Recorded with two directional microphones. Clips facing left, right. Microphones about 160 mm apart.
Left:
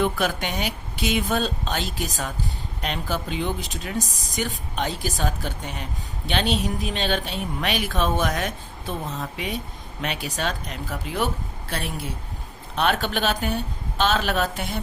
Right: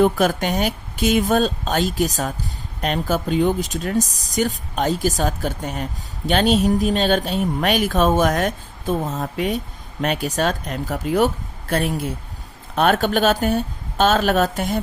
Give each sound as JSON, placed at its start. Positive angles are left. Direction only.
{"t": 0.0, "sound": "speech", "side_deg": -45}